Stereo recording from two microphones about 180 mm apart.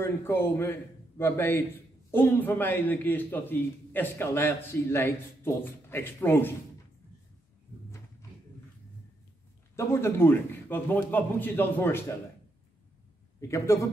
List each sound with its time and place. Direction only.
0.0 s a man's voice: 10° left (ahead or behind)
9.8 s a man's voice: 15° left (ahead or behind)
13.4 s a man's voice: 15° left (ahead or behind)